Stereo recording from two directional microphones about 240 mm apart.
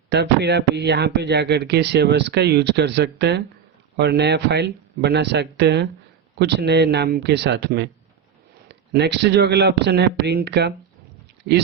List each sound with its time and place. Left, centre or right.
0.1 s speech: right
8.9 s speech: right